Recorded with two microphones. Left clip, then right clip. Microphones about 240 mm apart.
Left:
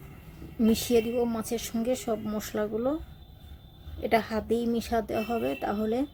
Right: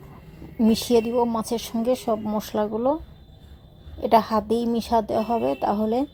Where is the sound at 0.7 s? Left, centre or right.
Centre.